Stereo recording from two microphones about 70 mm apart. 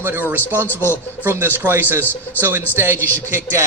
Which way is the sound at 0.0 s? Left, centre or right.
Right.